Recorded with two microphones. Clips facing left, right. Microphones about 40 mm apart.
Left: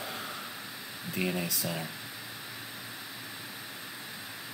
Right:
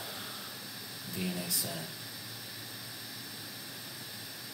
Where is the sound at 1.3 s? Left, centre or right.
Left.